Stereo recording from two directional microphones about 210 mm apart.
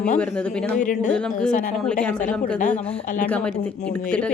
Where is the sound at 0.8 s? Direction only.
35° left (ahead or behind).